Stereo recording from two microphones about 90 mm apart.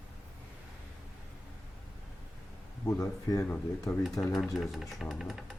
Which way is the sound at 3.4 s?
20° left (ahead or behind).